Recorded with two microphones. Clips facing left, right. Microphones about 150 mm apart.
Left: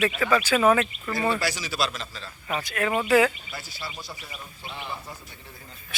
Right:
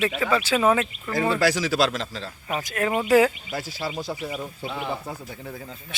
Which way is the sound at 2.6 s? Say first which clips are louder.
Right 2 dB; 40° right (ahead or behind).